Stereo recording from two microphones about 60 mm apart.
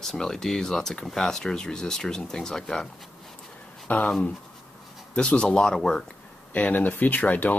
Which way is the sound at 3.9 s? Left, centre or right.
Left.